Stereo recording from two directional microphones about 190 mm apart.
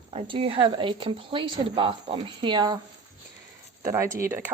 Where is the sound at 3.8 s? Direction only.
15° right (ahead or behind).